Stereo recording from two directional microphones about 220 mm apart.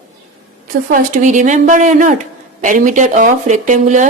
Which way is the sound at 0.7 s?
35° right (ahead or behind).